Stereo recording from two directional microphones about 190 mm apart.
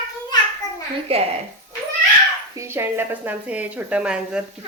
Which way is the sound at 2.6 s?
15° right (ahead or behind).